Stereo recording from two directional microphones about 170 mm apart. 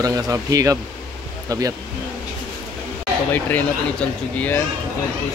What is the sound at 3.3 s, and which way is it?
Speech, 10° left (ahead or behind).